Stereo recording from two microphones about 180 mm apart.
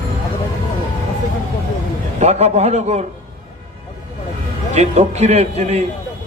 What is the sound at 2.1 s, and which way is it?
Speech, 40° right (ahead or behind).